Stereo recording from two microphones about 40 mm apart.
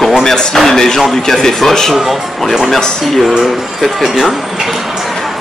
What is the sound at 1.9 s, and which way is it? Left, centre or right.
Speech, centre.